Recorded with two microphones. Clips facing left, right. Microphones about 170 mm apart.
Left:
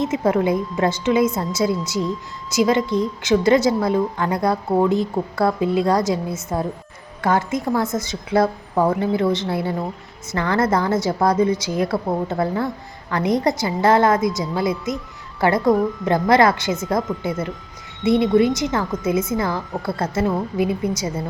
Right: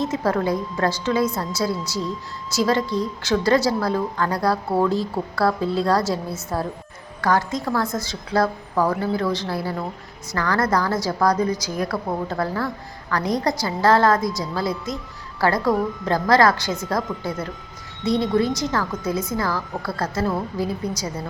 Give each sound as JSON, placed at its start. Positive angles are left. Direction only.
{"t": 0.0, "sound": "a woman's voice", "side_deg": 20}